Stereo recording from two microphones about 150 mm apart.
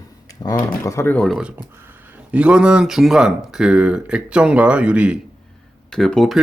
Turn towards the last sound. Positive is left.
turn(degrees=5)  # may be behind; listen again after turning